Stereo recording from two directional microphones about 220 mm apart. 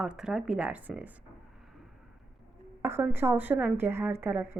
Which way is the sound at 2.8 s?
10° right (ahead or behind).